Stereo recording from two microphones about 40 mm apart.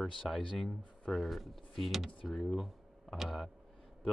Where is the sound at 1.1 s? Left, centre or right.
Centre.